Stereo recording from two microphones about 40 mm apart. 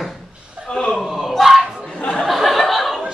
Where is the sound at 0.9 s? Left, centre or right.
Centre.